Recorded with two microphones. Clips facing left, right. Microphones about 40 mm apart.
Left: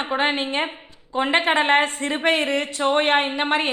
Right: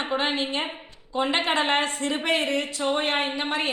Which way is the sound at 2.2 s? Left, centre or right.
Left.